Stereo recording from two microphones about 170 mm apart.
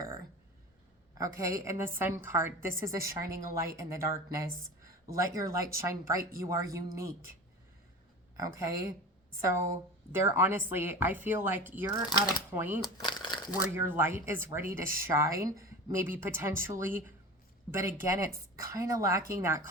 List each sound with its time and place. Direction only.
1.4 s a woman's voice: 15° right (ahead or behind)
8.4 s a woman's voice: 20° right (ahead or behind)
13.0 s crumpling: 25° left (ahead or behind)
13.7 s a woman's voice: 15° right (ahead or behind)